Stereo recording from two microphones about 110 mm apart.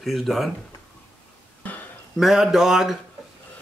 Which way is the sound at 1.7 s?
15° left (ahead or behind).